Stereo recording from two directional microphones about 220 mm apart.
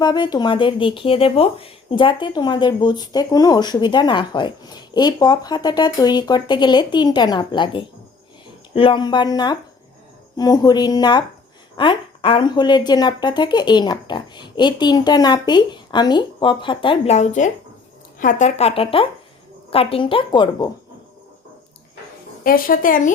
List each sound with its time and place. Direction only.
0.0 s speech: 20° left (ahead or behind)
22.4 s a woman's voice: 40° left (ahead or behind)